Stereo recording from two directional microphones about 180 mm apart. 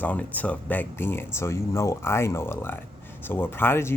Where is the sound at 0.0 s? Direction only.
10° left (ahead or behind).